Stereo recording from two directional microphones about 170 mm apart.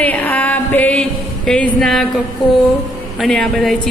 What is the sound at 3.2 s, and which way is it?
Speech, centre (ahead or behind).